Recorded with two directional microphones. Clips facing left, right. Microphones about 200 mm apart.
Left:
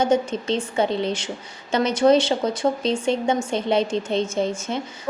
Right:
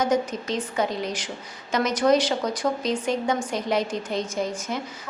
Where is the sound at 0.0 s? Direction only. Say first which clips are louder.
Left 3 dB; 30° left (ahead or behind).